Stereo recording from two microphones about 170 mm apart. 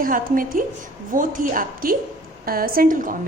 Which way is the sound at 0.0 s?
55° right (ahead or behind).